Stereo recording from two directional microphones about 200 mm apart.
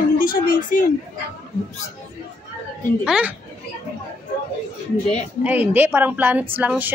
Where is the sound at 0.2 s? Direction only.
45° left (ahead or behind).